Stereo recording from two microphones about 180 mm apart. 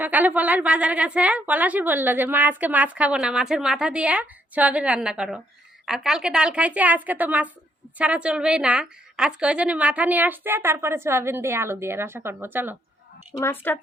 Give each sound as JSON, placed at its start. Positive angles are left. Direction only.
{"t": 0.0, "sound": "a woman's voice", "side_deg": -10}
{"t": 13.3, "sound": "a woman's voice", "side_deg": 15}